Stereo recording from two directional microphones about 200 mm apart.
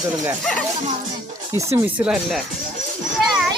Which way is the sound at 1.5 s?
10° right (ahead or behind).